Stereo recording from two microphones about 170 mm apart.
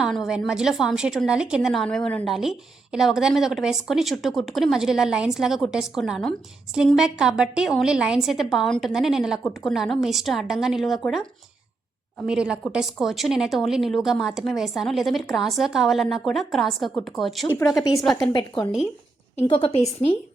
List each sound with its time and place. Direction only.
0.0 s speech: centre (ahead or behind)
12.3 s speech: 5° right (ahead or behind)
18.3 s a woman's voice: 25° left (ahead or behind)